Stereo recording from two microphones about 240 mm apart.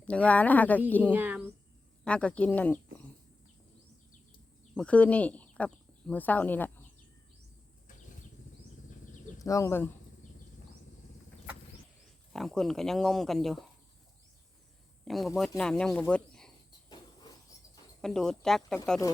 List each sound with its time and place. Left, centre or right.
0.0 s speech: centre
1.1 s speech: centre
2.0 s speech: centre
4.7 s speech: centre
9.4 s speech: centre
12.3 s speech: centre
15.0 s speech: centre
16.9 s a sound: centre
18.0 s speech: centre